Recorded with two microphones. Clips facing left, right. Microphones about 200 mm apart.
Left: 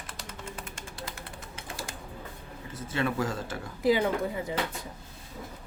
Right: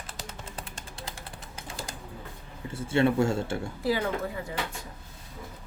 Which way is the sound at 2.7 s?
30° right (ahead or behind).